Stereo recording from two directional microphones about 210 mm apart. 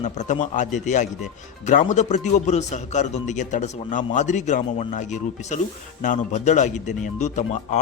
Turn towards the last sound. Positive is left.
turn(degrees=35)  # may be behind; listen again after turning